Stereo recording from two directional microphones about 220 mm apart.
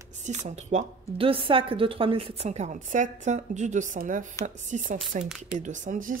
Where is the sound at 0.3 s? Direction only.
30° right (ahead or behind).